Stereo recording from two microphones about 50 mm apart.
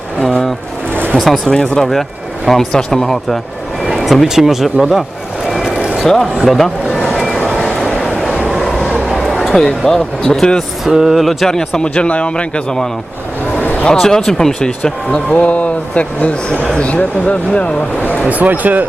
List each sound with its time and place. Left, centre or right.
0.2 s a sound: centre
1.1 s speech: centre
1.5 s speech: centre
6.4 s speech: centre
7.6 s a sound: centre
8.5 s vehicle: centre
9.6 s speech: centre
10.8 s speech: centre; by 12.6 s left
13.6 s a sound: left
13.8 s speech: centre
15.3 s speech: left
18.3 s speech: right